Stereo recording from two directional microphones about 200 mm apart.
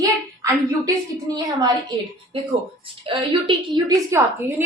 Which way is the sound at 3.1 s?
25° right (ahead or behind).